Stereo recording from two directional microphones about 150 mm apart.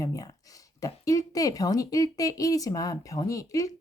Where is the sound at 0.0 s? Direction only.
25° left (ahead or behind).